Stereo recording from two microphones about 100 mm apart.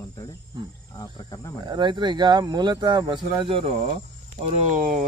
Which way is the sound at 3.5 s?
75° right (ahead or behind).